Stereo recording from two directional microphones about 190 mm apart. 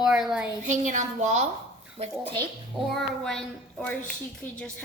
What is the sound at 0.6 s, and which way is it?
Speech, 40° right (ahead or behind).